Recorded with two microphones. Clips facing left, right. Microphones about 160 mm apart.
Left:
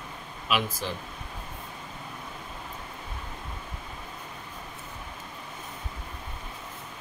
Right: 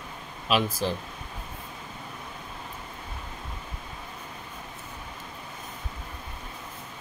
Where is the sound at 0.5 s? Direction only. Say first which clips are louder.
Right 3 dB; 35° right (ahead or behind).